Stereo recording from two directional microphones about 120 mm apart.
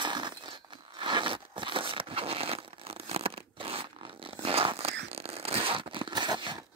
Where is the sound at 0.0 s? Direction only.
40° right (ahead or behind).